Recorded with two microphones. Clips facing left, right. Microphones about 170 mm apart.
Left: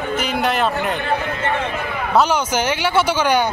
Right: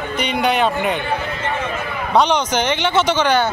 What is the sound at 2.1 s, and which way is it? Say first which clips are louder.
Speech: right 1 dB; 5° left (ahead or behind).